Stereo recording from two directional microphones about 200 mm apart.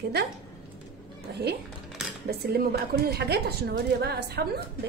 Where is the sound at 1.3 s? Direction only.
55° right (ahead or behind).